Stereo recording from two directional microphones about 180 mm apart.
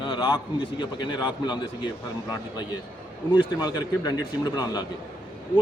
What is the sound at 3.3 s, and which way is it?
A man's voice, 25° left (ahead or behind).